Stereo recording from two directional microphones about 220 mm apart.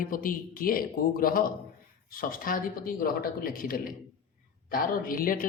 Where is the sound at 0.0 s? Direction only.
40° left (ahead or behind).